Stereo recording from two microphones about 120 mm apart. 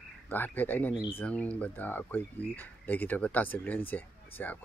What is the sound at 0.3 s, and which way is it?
Speech, 15° left (ahead or behind).